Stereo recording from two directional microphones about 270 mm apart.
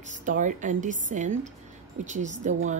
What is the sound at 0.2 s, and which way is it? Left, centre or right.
A woman's voice, right.